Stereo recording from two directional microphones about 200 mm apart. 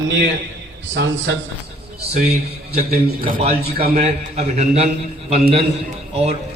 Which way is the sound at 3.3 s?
30° right (ahead or behind).